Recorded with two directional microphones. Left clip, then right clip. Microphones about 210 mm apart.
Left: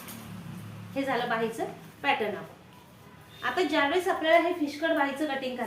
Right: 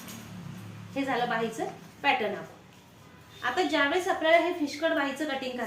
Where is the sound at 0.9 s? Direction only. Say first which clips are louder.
Even; centre (ahead or behind).